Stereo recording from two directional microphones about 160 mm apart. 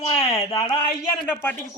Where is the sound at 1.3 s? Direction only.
15° left (ahead or behind).